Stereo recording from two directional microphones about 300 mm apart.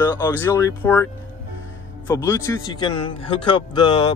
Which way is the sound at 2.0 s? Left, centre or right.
Centre.